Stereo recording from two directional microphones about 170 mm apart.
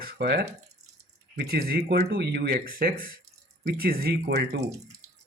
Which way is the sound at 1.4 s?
65° right (ahead or behind).